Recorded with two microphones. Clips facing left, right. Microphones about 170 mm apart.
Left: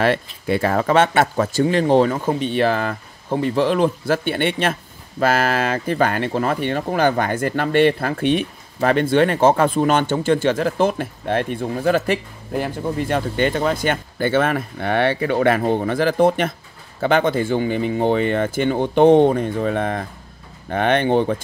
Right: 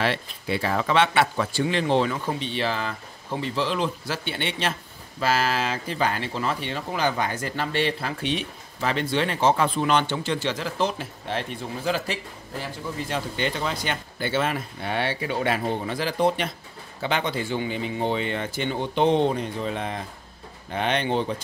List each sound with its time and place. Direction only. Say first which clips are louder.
0.0 s speech: left 7 dB; 50° left (ahead or behind)